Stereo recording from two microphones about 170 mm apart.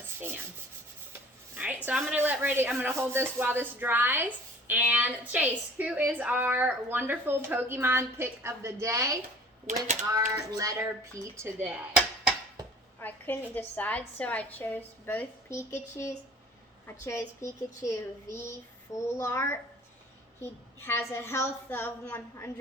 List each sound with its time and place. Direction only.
1.5 s a woman's voice: 10° right (ahead or behind)
9.6 s speech: 45° right (ahead or behind)
10.3 s a sound: 20° right (ahead or behind)
11.2 s a woman's voice: 15° right (ahead or behind)
13.0 s a woman's voice: 10° left (ahead or behind)